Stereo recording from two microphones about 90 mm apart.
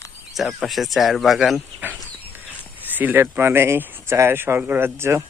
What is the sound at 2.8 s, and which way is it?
Speech, 20° right (ahead or behind).